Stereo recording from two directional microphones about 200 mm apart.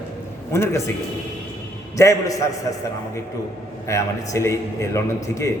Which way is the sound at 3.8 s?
15° left (ahead or behind).